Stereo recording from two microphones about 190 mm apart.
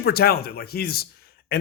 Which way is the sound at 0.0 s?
55° left (ahead or behind).